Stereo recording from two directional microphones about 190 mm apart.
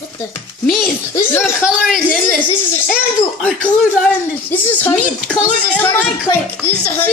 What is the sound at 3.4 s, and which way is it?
Speech, 5° left (ahead or behind).